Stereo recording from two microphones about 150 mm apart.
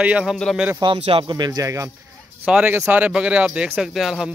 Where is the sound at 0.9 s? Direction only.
40° right (ahead or behind).